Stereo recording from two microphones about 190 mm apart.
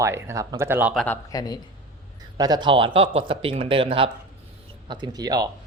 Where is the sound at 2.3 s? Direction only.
20° right (ahead or behind).